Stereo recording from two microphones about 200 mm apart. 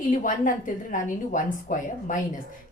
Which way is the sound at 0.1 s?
40° left (ahead or behind).